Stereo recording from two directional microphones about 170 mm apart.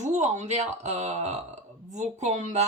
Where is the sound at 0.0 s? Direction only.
45° right (ahead or behind).